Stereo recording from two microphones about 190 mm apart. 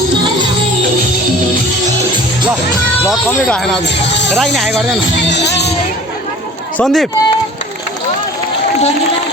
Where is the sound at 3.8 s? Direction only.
65° left (ahead or behind).